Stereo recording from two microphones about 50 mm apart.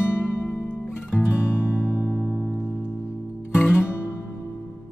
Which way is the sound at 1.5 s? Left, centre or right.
Left.